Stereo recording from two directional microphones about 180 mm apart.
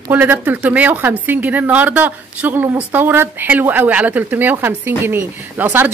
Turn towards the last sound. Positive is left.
turn(degrees=-10)  # may be behind; listen again after turning